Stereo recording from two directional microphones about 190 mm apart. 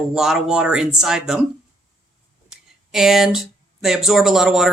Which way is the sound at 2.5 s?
5° right (ahead or behind).